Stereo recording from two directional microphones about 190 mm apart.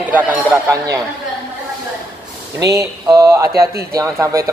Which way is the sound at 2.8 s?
20° right (ahead or behind).